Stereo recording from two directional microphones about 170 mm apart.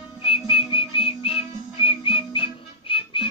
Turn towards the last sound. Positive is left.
turn(degrees=30)  # may be behind; listen again after turning